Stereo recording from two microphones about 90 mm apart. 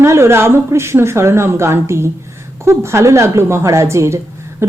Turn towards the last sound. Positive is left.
turn(degrees=-30)  # may be behind; listen again after turning